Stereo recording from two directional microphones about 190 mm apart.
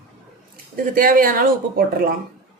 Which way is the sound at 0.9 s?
45° right (ahead or behind).